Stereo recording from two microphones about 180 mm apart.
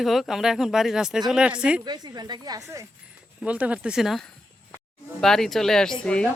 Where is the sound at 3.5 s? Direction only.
5° right (ahead or behind).